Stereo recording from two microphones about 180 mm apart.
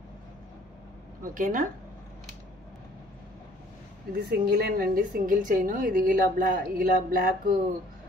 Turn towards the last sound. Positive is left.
turn(degrees=-55)  # may be behind; listen again after turning